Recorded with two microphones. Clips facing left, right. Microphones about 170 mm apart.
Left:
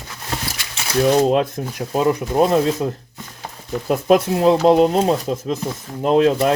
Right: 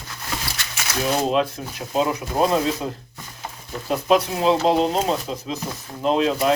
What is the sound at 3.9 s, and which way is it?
Speech, 50° left (ahead or behind).